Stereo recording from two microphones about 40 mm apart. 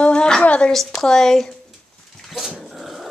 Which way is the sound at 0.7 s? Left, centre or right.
Centre.